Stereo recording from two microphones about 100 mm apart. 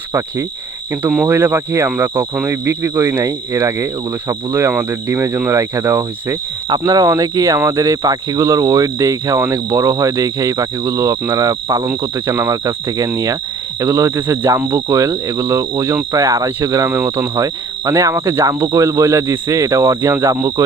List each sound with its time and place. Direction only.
0.1 s speech: 30° right (ahead or behind)
6.7 s speech: 40° right (ahead or behind)
11.9 s speech: 25° right (ahead or behind)